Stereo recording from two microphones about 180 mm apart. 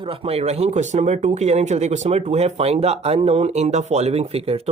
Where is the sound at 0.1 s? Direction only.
35° right (ahead or behind).